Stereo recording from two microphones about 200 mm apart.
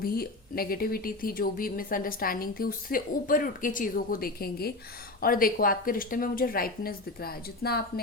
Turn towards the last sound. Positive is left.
turn(degrees=50)  # may be behind; listen again after turning